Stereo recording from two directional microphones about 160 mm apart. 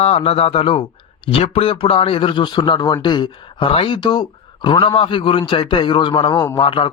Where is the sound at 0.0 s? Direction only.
40° left (ahead or behind).